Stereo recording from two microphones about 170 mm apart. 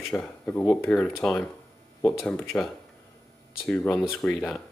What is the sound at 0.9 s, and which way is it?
Speech, centre (ahead or behind).